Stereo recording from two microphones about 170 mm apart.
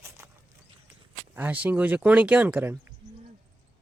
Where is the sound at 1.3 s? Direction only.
10° right (ahead or behind).